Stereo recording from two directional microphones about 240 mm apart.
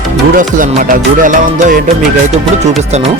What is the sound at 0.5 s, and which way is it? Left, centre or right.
Speech, right.